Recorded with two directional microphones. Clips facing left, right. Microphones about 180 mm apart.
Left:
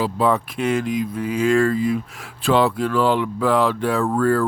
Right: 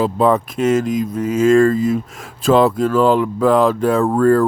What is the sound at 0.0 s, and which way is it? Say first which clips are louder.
Speech: right 5 dB; 45° right (ahead or behind).